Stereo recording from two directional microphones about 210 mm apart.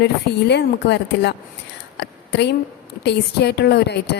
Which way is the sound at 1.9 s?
55° left (ahead or behind).